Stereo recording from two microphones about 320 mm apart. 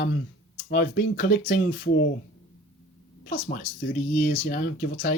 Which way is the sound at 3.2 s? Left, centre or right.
Left.